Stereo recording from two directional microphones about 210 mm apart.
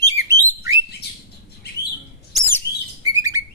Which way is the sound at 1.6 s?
50° left (ahead or behind).